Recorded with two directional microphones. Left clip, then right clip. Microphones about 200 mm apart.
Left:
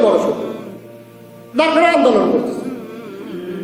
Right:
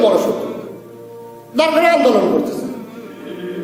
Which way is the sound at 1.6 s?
Centre (ahead or behind).